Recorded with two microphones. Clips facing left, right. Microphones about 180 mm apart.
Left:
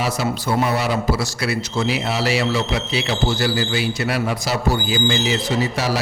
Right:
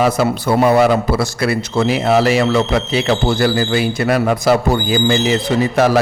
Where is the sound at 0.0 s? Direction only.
55° right (ahead or behind).